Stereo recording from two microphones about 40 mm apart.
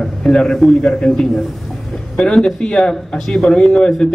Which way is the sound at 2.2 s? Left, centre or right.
Centre.